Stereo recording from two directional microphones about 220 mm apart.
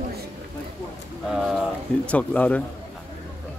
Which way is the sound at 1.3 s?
Centre (ahead or behind).